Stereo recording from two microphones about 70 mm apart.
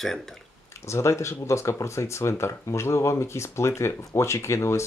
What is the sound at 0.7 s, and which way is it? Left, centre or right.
Speech, left.